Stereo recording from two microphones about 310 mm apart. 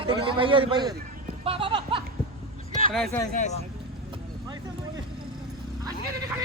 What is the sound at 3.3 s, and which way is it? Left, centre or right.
Speech, left.